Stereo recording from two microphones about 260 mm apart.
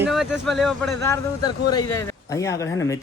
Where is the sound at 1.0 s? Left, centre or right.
Centre.